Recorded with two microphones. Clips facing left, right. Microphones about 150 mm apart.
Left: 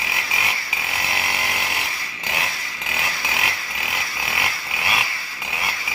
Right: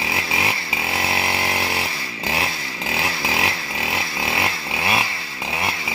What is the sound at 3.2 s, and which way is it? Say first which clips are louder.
Chainsaw: right 4 dB; 30° right (ahead or behind).